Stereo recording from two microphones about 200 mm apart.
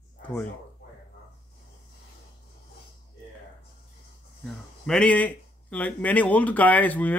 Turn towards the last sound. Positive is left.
turn(degrees=10)  # may be behind; listen again after turning